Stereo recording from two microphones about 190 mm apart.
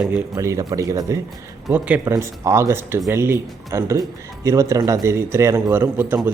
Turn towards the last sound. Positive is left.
turn(degrees=-10)  # may be behind; listen again after turning